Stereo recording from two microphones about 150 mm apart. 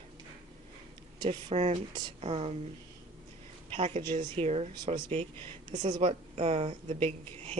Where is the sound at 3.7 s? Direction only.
45° right (ahead or behind).